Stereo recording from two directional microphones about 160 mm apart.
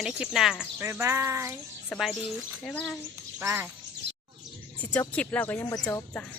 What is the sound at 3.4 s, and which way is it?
Speech, 15° right (ahead or behind).